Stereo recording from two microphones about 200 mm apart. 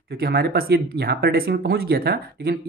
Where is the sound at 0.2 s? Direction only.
50° right (ahead or behind).